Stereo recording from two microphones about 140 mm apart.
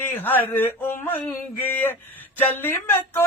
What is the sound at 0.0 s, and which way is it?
Speech, 15° left (ahead or behind).